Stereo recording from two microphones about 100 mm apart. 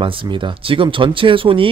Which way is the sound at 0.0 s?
55° right (ahead or behind).